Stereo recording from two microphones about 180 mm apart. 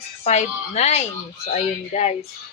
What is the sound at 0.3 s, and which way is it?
Speech, 40° left (ahead or behind).